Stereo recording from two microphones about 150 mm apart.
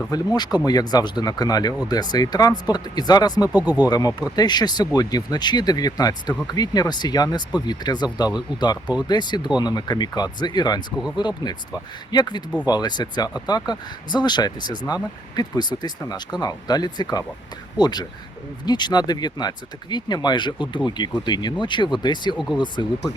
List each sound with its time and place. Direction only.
0.1 s speech: 25° left (ahead or behind)
3.5 s speech: 10° right (ahead or behind)
3.8 s speech: 25° left (ahead or behind)